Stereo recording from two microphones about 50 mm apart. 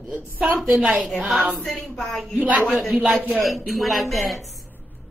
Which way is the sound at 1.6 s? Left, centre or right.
Centre.